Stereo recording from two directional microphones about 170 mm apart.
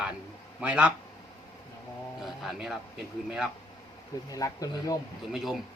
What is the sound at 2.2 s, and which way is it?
Speech, centre (ahead or behind).